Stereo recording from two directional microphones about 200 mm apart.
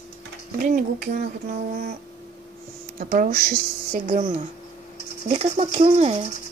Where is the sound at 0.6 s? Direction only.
45° right (ahead or behind).